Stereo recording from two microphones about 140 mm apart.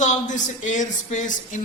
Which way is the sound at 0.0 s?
60° left (ahead or behind).